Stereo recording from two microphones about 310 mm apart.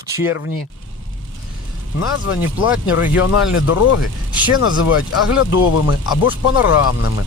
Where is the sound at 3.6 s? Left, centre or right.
Left.